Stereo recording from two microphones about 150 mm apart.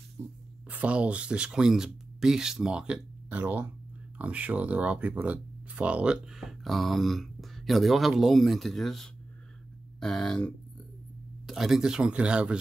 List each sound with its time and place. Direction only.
0.2 s speech: 15° right (ahead or behind)